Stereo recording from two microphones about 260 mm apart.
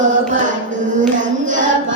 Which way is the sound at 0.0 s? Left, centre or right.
Right.